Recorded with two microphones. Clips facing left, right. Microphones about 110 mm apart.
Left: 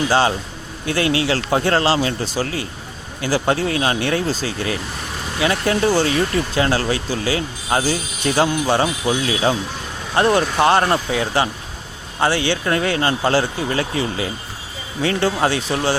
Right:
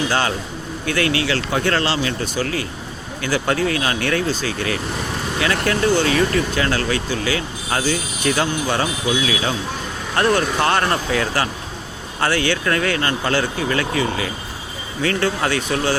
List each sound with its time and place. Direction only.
0.1 s speech: 30° left (ahead or behind)